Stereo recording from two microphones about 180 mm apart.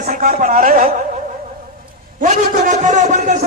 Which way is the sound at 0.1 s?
45° right (ahead or behind).